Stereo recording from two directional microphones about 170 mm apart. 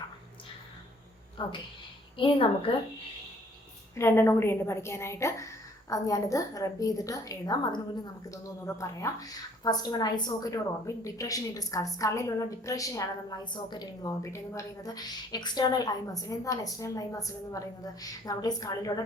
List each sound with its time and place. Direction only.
1.4 s a woman's voice: 30° left (ahead or behind)
3.9 s a woman's voice: 15° left (ahead or behind)